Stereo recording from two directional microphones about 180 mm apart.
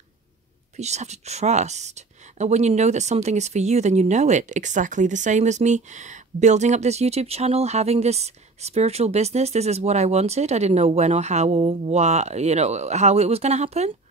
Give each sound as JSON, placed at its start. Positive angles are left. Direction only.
{"t": 0.7, "sound": "speech", "side_deg": -40}